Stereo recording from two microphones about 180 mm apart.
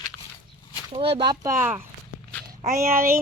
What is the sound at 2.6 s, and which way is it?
Speech, 55° right (ahead or behind).